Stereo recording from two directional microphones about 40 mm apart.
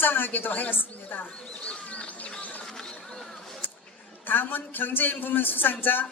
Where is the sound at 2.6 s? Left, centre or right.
Centre.